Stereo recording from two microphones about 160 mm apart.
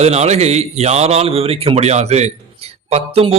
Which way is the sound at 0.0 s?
40° right (ahead or behind).